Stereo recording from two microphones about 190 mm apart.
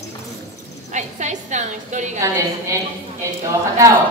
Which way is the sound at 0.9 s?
40° right (ahead or behind).